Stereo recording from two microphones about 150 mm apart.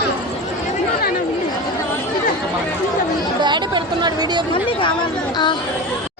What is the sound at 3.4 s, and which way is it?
Chatter, 30° right (ahead or behind).